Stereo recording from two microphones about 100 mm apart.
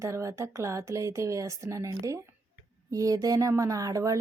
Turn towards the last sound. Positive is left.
turn(degrees=-35)  # may be behind; listen again after turning